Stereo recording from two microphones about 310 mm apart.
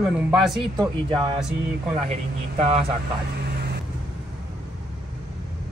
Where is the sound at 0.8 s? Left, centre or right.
Centre.